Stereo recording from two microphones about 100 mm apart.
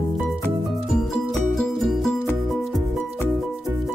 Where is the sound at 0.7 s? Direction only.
Centre (ahead or behind).